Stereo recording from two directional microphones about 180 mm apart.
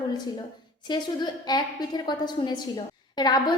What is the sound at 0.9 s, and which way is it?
A woman's voice, 25° left (ahead or behind).